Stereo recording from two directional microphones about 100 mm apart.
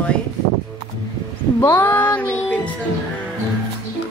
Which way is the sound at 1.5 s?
20° left (ahead or behind).